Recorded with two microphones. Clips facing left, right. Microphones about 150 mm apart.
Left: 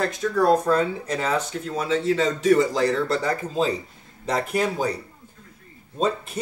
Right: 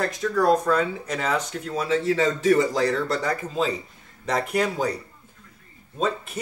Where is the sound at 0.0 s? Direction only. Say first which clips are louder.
Left 1 dB; 20° left (ahead or behind).